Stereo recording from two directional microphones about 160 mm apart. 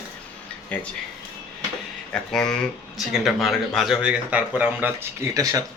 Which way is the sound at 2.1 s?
5° left (ahead or behind).